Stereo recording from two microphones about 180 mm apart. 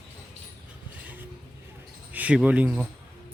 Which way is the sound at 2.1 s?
10° right (ahead or behind).